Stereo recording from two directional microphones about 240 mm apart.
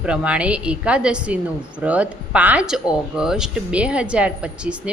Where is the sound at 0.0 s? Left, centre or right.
Centre.